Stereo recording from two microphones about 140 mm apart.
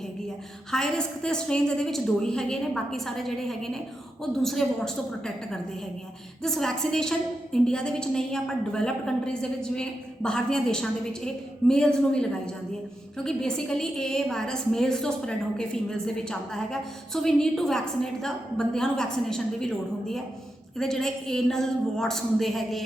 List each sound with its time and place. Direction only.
0.7 s a woman's voice: 5° left (ahead or behind)
6.4 s a woman's voice: 5° left (ahead or behind)